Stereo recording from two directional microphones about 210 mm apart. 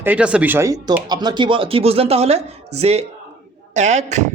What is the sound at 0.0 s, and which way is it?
A man's voice, 5° right (ahead or behind).